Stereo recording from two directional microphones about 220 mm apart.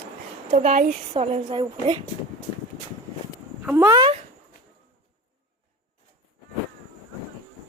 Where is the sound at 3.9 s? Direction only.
20° right (ahead or behind).